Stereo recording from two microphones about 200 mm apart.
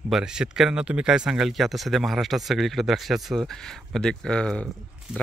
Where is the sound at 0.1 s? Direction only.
5° right (ahead or behind).